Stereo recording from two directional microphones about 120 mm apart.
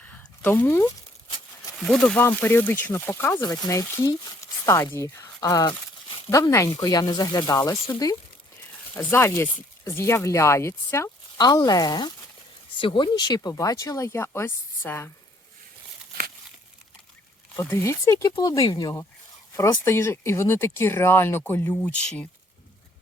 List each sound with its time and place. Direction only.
0.0 s a sound: 10° left (ahead or behind)
1.8 s speech: 5° left (ahead or behind)
2.2 s speech: 15° left (ahead or behind)
9.0 s speech: 20° left (ahead or behind)
11.3 s speech: 35° left (ahead or behind)
17.6 s speech: 20° left (ahead or behind)